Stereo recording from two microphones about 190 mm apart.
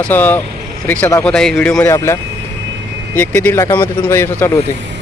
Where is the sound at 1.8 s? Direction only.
15° left (ahead or behind).